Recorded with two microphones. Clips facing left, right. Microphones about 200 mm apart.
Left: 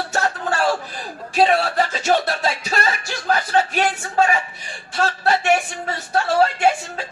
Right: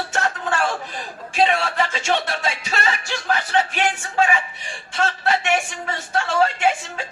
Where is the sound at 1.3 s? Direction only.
40° left (ahead or behind).